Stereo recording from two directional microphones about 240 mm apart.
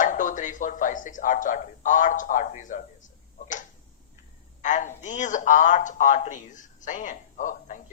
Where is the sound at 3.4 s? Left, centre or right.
Left.